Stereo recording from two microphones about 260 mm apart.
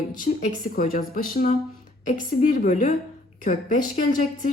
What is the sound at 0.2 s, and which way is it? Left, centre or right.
Speech, left.